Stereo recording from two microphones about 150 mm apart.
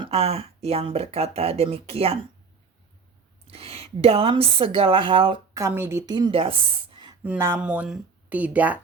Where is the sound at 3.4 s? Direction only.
40° right (ahead or behind).